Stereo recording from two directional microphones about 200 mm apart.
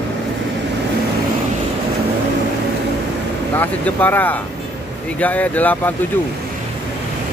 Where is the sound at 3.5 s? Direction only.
10° left (ahead or behind).